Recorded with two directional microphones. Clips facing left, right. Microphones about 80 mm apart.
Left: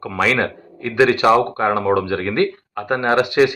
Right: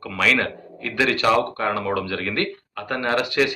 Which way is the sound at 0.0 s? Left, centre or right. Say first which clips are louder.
Left 3 dB; left.